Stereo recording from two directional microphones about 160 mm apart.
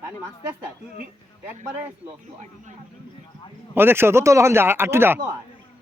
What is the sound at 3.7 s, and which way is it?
A man's voice, 15° right (ahead or behind).